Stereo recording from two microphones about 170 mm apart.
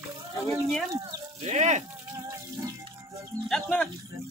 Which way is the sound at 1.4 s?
40° right (ahead or behind).